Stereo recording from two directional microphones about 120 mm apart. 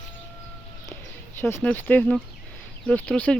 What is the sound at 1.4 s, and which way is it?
Speech, 20° left (ahead or behind).